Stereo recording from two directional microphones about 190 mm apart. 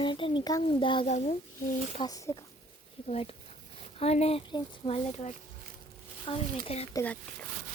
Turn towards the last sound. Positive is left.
turn(degrees=15)  # may be behind; listen again after turning